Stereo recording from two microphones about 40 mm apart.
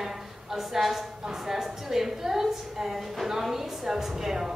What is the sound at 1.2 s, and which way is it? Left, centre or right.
A woman's voice, centre.